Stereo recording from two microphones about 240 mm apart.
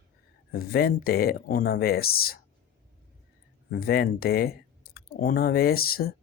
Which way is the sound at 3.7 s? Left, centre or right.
Left.